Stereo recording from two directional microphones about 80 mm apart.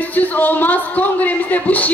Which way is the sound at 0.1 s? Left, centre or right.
Left.